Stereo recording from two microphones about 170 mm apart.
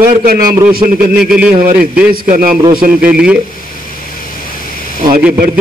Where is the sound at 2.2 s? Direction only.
55° right (ahead or behind).